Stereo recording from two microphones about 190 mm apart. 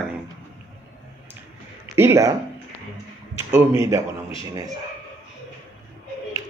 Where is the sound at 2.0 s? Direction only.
15° right (ahead or behind).